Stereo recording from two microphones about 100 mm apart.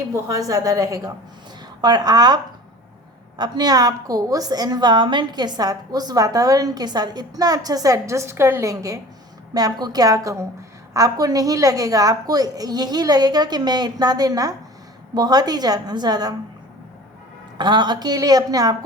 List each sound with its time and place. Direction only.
0.1 s a woman's voice: 35° right (ahead or behind)
8.6 s a woman's voice: 35° right (ahead or behind)
17.6 s a woman's voice: 50° right (ahead or behind)